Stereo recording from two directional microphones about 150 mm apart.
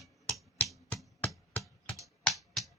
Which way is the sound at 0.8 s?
10° left (ahead or behind).